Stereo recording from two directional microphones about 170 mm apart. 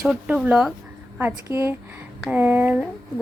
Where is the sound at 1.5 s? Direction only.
25° left (ahead or behind).